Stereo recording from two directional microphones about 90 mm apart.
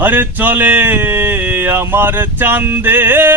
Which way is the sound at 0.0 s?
20° right (ahead or behind).